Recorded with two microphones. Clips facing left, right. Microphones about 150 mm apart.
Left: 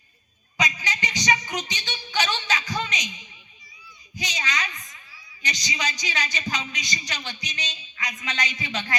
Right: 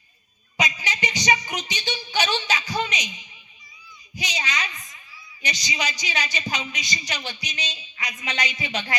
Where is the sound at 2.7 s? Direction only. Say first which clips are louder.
Right 2 dB; 15° right (ahead or behind).